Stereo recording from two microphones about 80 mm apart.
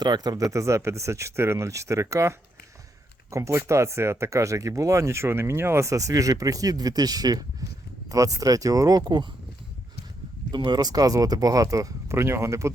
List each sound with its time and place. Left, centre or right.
0.0 s speech: right
3.3 s speech: right
10.5 s speech: right
12.1 s speech: right